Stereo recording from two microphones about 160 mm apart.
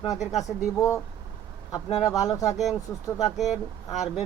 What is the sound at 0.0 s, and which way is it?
Speech, 20° left (ahead or behind).